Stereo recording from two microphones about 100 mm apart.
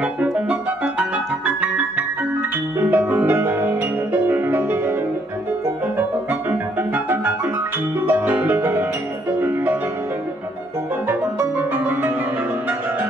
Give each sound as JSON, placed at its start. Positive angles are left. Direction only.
{"t": 0.0, "sound": "music", "side_deg": -15}
{"t": 2.8, "sound": "music", "side_deg": -25}
{"t": 6.5, "sound": "music", "side_deg": -20}
{"t": 11.1, "sound": "music", "side_deg": -20}